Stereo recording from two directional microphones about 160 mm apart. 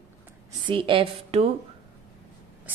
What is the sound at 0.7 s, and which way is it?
Speech, 30° right (ahead or behind).